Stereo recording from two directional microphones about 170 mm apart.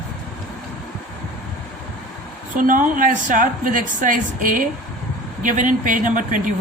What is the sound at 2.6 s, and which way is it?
A woman's voice, 50° right (ahead or behind).